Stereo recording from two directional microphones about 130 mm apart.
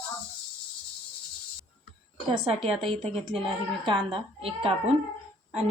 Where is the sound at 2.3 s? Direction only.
50° right (ahead or behind).